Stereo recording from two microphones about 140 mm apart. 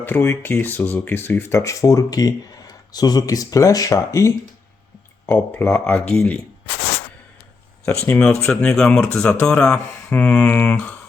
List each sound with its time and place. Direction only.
0.0 s speech: 15° left (ahead or behind)
8.0 s speech: 15° left (ahead or behind)
8.7 s speech: 5° left (ahead or behind)